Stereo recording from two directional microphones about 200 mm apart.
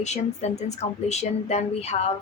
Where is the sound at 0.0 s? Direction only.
35° left (ahead or behind).